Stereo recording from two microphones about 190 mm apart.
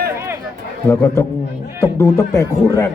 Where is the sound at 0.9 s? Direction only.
15° left (ahead or behind).